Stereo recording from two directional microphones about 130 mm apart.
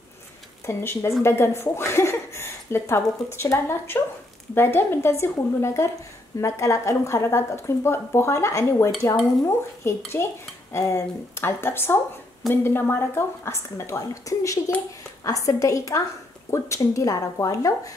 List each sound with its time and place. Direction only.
0.7 s a woman's voice: 20° left (ahead or behind)